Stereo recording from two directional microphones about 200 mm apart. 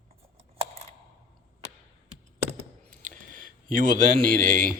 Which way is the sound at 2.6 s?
40° right (ahead or behind).